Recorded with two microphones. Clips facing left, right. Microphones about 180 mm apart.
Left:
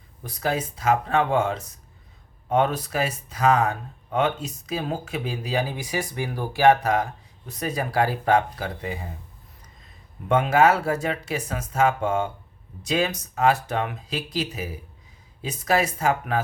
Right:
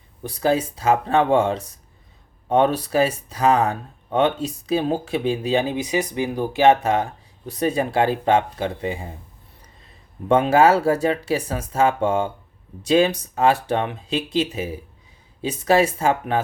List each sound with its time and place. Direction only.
0.2 s speech: 30° right (ahead or behind)
10.2 s speech: 30° right (ahead or behind)